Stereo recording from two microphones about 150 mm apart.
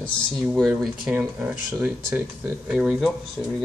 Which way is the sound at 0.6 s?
Centre (ahead or behind).